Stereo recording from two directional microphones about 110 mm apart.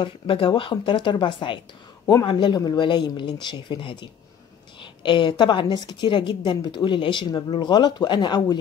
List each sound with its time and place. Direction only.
0.0 s a woman's voice: 50° left (ahead or behind)